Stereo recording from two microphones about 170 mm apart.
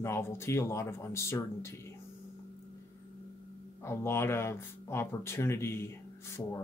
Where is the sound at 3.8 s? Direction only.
15° left (ahead or behind).